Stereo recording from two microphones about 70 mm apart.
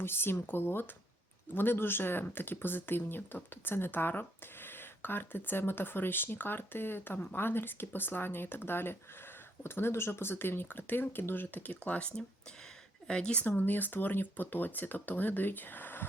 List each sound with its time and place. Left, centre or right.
0.0 s speech: left; by 13.5 s centre
13.6 s speech: left